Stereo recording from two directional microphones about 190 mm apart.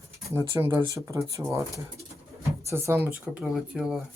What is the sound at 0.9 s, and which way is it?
Speech, 15° right (ahead or behind).